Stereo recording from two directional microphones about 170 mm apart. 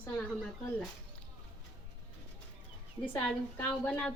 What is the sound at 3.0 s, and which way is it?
A woman's voice, 10° left (ahead or behind).